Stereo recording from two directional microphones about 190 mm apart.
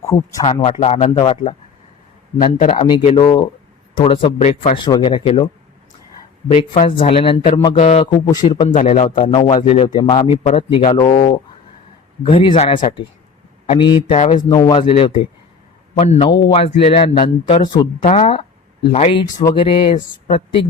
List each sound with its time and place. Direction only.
0.0 s speech: 15° left (ahead or behind)
0.6 s speech: 35° left (ahead or behind)
2.4 s speech: 40° left (ahead or behind)
3.2 s a man's voice: 20° left (ahead or behind)
4.9 s a man's voice: 25° left (ahead or behind)
6.5 s a man's voice: 30° left (ahead or behind)
8.3 s a man's voice: 25° left (ahead or behind)
8.7 s a man's voice: 40° left (ahead or behind)
14.2 s speech: 40° left (ahead or behind)
14.5 s a man's voice: 20° left (ahead or behind)
18.0 s a man's voice: 35° left (ahead or behind)